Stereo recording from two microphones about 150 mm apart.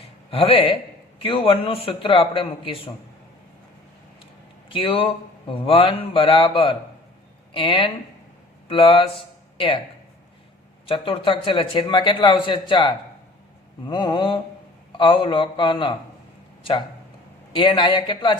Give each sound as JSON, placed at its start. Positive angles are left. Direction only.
{"t": 0.3, "sound": "a man's voice", "side_deg": 40}
{"t": 4.7, "sound": "a man's voice", "side_deg": 35}
{"t": 10.8, "sound": "a man's voice", "side_deg": 35}
{"t": 17.5, "sound": "a man's voice", "side_deg": 35}